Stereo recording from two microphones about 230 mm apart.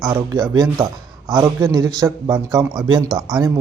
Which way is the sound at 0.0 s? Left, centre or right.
Centre.